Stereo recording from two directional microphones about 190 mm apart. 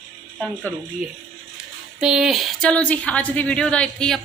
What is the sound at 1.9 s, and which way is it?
A woman's voice, 5° right (ahead or behind).